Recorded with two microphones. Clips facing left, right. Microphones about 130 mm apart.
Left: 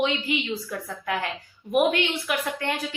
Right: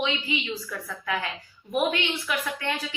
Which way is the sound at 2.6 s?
50° left (ahead or behind).